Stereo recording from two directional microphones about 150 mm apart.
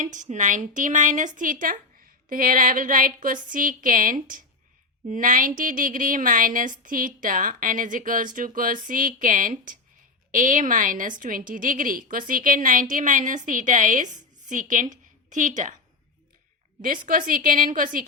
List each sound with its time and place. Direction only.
0.0 s speech: 55° right (ahead or behind)
16.8 s speech: 65° right (ahead or behind)